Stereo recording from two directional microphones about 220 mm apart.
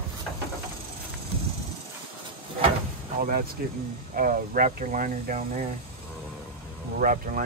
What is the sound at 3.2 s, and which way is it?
Speech, 40° right (ahead or behind).